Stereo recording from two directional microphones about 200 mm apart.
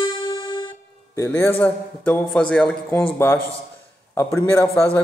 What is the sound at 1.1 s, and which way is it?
A man's voice, 15° left (ahead or behind).